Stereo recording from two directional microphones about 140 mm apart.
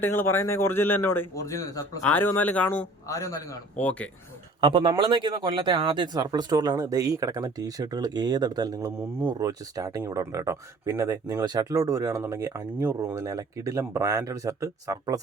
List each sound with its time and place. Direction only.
0.2 s a man's voice: 15° left (ahead or behind)
2.0 s a man's voice: 10° left (ahead or behind)
3.8 s a man's voice: 10° left (ahead or behind)
4.6 s speech: 35° right (ahead or behind)